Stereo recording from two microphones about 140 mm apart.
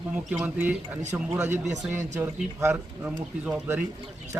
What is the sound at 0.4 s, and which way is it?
Speech, 10° right (ahead or behind).